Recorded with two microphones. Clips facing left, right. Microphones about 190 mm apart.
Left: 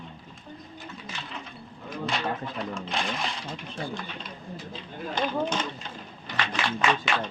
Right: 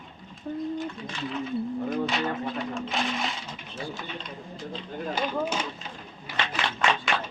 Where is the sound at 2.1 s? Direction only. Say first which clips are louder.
Right 2 dB; centre (ahead or behind).